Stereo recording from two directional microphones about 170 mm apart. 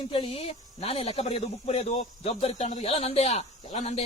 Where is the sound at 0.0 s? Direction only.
30° left (ahead or behind).